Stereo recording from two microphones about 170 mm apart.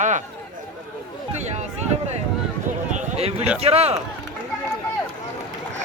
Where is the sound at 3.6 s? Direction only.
35° right (ahead or behind).